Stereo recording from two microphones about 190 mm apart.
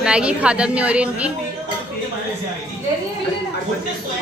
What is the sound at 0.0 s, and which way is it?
A woman's voice, 5° right (ahead or behind).